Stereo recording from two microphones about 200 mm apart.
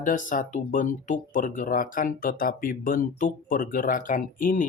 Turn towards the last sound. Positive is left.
turn(degrees=45)  # may be behind; listen again after turning